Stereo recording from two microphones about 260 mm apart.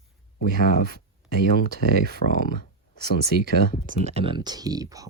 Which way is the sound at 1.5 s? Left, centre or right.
Right.